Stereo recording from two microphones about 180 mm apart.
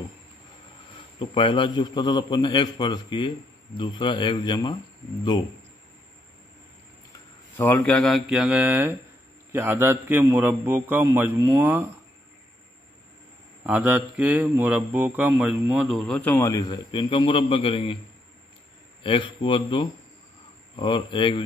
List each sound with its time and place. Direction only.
1.2 s a man's voice: 30° left (ahead or behind)
7.1 s a man's voice: 10° left (ahead or behind); by 11.9 s 10° right (ahead or behind)
13.7 s speech: 10° right (ahead or behind); by 17.9 s 30° left (ahead or behind)
19.0 s a man's voice: 25° left (ahead or behind)